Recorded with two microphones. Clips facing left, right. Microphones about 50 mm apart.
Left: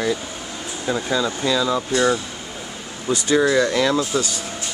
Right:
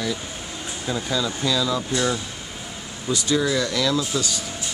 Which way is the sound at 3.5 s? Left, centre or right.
Left.